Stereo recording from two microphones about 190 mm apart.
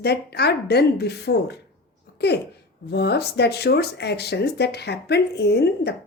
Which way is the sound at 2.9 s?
60° left (ahead or behind).